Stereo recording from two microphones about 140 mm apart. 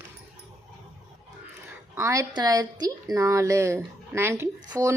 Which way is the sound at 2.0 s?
20° right (ahead or behind).